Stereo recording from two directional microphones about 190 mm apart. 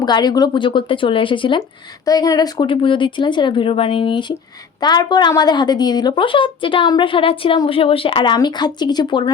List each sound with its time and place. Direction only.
0.0 s a woman's voice: 20° left (ahead or behind)